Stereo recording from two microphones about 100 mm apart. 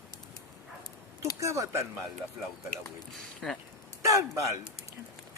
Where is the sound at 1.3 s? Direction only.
30° right (ahead or behind).